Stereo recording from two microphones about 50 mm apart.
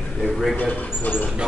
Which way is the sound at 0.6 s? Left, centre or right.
Left.